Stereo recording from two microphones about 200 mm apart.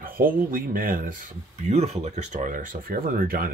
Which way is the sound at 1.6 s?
35° right (ahead or behind).